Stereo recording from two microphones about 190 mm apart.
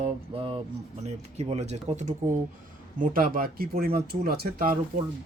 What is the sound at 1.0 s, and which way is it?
Speech, 35° right (ahead or behind).